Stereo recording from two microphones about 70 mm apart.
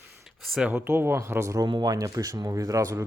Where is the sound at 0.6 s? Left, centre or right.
Right.